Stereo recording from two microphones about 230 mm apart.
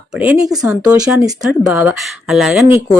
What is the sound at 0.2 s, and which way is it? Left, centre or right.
Speech, centre.